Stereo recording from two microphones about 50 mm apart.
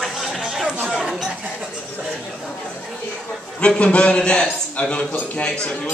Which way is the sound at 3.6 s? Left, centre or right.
Left.